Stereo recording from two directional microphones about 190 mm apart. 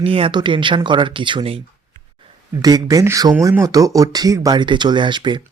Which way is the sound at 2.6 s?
20° right (ahead or behind).